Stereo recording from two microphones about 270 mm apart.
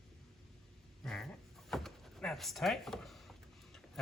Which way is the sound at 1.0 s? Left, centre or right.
Centre.